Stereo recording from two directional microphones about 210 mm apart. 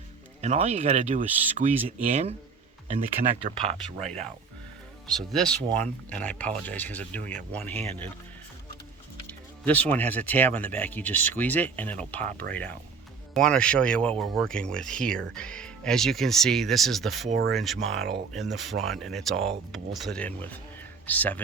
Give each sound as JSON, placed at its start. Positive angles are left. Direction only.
{"t": 0.4, "sound": "speech", "side_deg": -30}
{"t": 3.6, "sound": "speech", "side_deg": 5}
{"t": 9.6, "sound": "speech", "side_deg": 5}
{"t": 17.3, "sound": "speech", "side_deg": -55}
{"t": 17.6, "sound": "speech", "side_deg": 0}